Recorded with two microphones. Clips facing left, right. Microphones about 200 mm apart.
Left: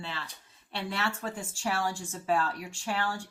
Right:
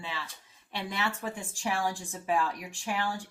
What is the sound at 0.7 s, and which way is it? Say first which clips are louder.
Speech: even; 15° right (ahead or behind).